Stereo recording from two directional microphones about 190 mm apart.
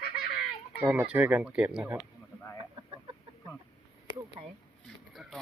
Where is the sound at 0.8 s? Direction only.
10° right (ahead or behind).